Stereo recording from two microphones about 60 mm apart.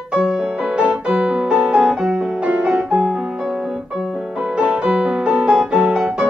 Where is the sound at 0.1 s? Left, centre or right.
Centre.